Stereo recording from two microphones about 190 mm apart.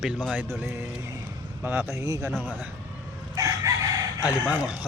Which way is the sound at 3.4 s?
15° right (ahead or behind).